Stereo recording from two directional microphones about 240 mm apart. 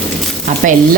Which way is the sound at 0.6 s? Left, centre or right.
Right.